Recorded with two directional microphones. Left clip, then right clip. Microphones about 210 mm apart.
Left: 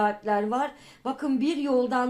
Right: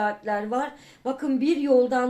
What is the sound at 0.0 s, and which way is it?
Speech, 25° left (ahead or behind).